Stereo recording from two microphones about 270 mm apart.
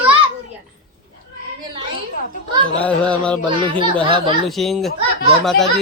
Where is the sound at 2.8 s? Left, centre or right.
Centre.